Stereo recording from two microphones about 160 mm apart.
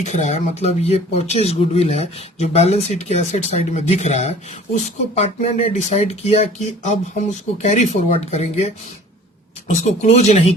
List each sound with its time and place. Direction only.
0.0 s speech: 45° left (ahead or behind)